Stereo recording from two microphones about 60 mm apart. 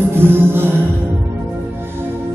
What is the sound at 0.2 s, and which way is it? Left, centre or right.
Music, right.